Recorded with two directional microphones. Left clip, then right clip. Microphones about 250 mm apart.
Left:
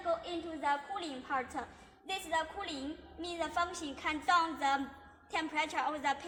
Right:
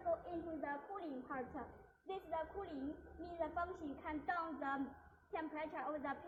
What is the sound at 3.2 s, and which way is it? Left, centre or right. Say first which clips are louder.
A woman's voice: left 8 dB; centre.